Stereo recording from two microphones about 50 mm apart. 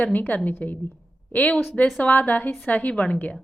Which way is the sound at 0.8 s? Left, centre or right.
Left.